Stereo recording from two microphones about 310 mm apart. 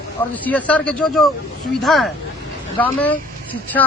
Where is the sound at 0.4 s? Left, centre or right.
Centre.